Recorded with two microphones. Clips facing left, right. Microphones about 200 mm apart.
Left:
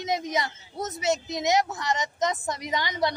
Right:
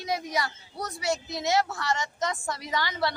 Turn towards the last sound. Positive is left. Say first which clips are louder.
# left 2 dB
turn(degrees=20)  # may be behind; listen again after turning